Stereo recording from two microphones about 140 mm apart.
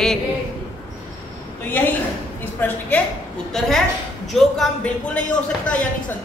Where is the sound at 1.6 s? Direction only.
15° left (ahead or behind).